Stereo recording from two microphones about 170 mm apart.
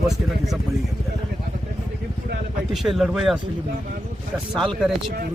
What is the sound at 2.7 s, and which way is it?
Speech, centre (ahead or behind).